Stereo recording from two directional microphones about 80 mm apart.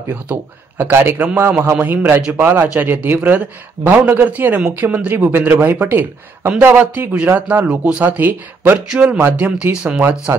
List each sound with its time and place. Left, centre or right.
0.1 s a man's voice: right
2.7 s a man's voice: centre
8.2 s a man's voice: right
8.7 s speech: centre